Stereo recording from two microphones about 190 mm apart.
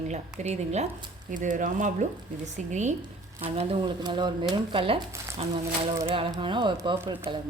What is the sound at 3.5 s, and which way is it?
Speech, 25° right (ahead or behind).